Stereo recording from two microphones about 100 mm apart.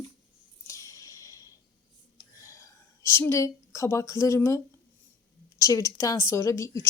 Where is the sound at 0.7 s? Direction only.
35° left (ahead or behind).